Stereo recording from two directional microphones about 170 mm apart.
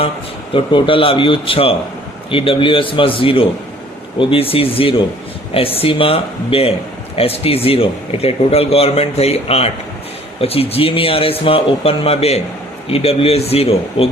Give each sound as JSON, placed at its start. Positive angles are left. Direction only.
{"t": 0.5, "sound": "a man's voice", "side_deg": 30}